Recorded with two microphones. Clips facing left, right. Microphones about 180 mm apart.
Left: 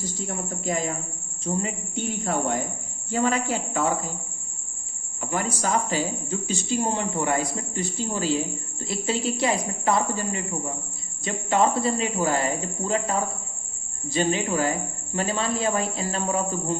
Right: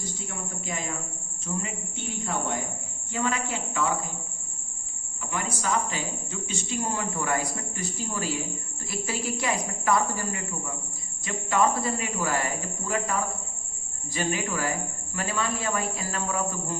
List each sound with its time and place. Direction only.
0.3 s speech: 40° left (ahead or behind)
5.2 s speech: 40° left (ahead or behind)